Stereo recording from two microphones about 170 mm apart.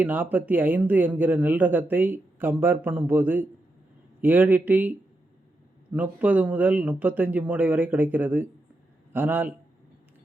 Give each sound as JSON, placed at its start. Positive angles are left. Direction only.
{"t": 0.0, "sound": "speech", "side_deg": -10}